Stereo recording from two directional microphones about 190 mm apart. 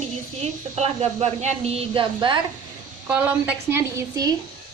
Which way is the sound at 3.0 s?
10° right (ahead or behind).